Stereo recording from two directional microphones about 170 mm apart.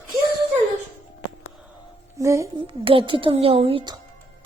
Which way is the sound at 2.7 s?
30° right (ahead or behind).